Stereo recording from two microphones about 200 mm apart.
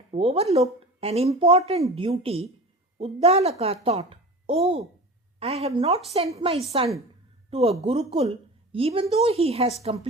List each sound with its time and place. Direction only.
0.1 s a woman's voice: 30° right (ahead or behind)